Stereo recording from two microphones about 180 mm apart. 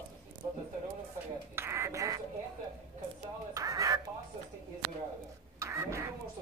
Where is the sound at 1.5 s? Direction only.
15° right (ahead or behind).